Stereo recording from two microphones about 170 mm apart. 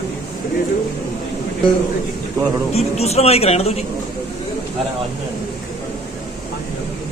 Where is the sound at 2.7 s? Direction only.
40° left (ahead or behind).